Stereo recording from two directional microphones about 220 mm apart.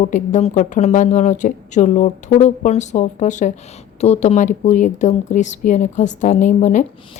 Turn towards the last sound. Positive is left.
turn(degrees=35)  # may be behind; listen again after turning